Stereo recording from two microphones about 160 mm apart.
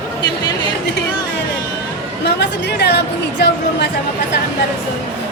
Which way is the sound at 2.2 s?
90° left.